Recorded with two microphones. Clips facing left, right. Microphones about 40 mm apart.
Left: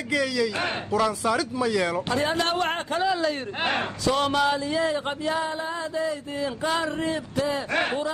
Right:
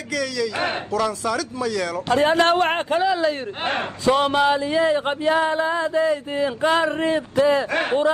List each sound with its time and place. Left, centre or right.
0.1 s speech: centre
2.0 s speech: right
2.6 s a man's voice: right
3.0 s a man's voice: centre
4.2 s a sound: right